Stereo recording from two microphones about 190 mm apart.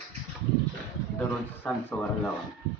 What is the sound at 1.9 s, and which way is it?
Speech, 5° left (ahead or behind).